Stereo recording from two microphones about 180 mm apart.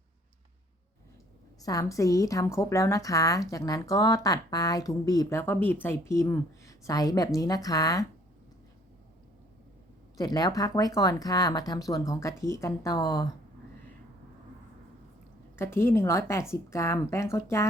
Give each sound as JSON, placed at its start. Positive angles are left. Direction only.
{"t": 1.6, "sound": "a woman's voice", "side_deg": 20}
{"t": 10.2, "sound": "a woman's voice", "side_deg": 20}
{"t": 15.5, "sound": "a woman's voice", "side_deg": 15}